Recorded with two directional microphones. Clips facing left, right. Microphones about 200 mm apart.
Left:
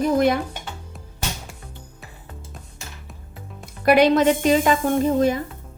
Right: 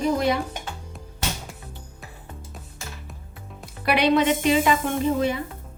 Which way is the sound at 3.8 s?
45° left (ahead or behind).